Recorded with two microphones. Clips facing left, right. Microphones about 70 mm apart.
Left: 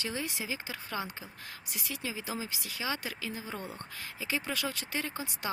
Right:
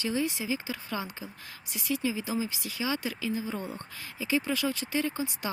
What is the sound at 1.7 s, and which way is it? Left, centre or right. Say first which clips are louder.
Speech: right 8 dB; left.